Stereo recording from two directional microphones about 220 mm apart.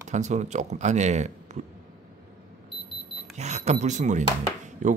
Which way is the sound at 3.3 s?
30° right (ahead or behind).